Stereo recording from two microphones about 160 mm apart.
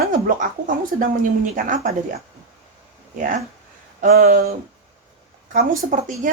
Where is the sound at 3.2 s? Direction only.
50° right (ahead or behind).